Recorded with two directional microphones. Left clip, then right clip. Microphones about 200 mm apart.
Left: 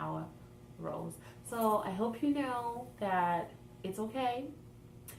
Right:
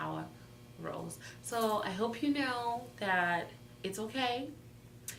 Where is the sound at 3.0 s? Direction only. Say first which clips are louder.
Even; 15° right (ahead or behind).